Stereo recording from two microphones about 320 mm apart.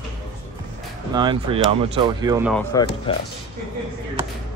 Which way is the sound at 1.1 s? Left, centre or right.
Centre.